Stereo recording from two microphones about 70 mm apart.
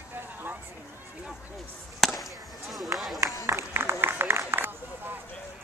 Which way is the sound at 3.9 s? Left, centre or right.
Right.